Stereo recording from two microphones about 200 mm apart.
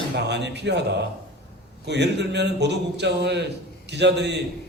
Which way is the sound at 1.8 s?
60° right (ahead or behind).